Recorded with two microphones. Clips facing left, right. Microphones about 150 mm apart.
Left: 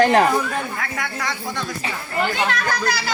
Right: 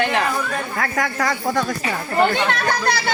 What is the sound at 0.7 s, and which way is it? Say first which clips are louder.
Speech: right 5 dB; 45° right (ahead or behind).